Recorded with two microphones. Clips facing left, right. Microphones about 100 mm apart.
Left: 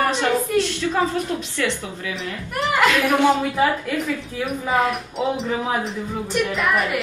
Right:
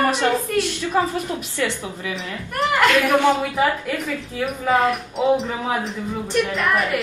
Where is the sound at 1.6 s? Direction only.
20° right (ahead or behind).